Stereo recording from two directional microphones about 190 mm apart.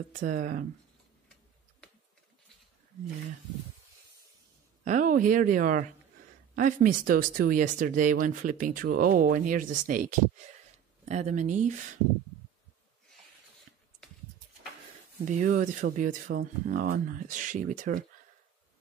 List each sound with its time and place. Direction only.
0.2 s speech: 45° right (ahead or behind)
4.8 s speech: 40° right (ahead or behind)
15.2 s speech: 40° right (ahead or behind)